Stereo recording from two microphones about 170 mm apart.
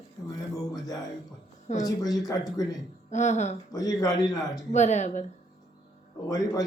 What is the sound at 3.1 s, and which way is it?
Speech, 45° left (ahead or behind).